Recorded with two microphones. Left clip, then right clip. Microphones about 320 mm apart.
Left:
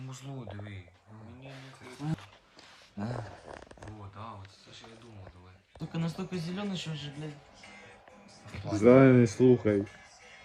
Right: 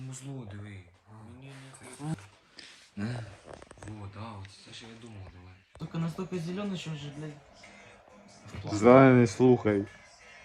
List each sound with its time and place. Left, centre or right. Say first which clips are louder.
0.3 s speech: left 3 dB; left
1.8 s wild animals: left 1 dB; centre
5.8 s a man's voice: even; centre
8.5 s a man's voice: right 2 dB; centre